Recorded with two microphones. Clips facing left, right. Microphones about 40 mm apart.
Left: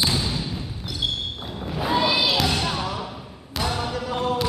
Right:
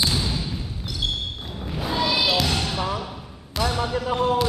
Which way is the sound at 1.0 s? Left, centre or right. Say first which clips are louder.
Left 1 dB; centre.